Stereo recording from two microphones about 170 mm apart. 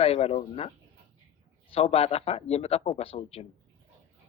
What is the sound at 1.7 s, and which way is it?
A man's voice, 35° left (ahead or behind).